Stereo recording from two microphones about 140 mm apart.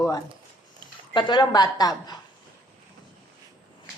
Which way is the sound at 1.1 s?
35° left (ahead or behind).